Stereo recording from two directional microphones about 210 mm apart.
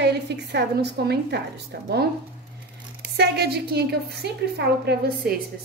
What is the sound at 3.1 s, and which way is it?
A woman's voice, 50° right (ahead or behind).